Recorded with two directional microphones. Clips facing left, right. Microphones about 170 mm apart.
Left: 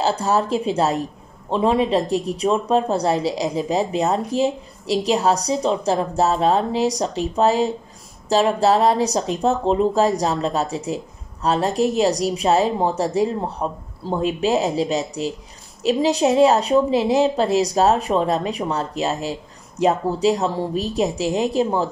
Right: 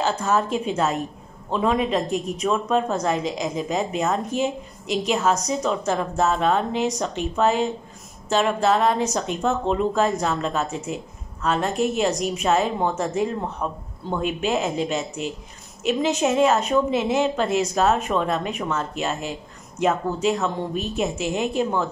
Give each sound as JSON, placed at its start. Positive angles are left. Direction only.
{"t": 0.0, "sound": "speech", "side_deg": 35}